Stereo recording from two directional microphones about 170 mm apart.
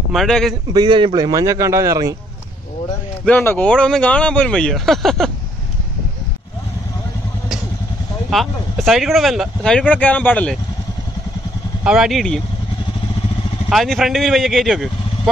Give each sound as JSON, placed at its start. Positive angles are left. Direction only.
{"t": 0.1, "sound": "speech", "side_deg": 0}
{"t": 0.7, "sound": "a man's voice", "side_deg": -25}
{"t": 3.3, "sound": "speech", "side_deg": 10}
{"t": 8.3, "sound": "speech", "side_deg": 0}
{"t": 11.8, "sound": "speech", "side_deg": -5}
{"t": 13.7, "sound": "speech", "side_deg": 0}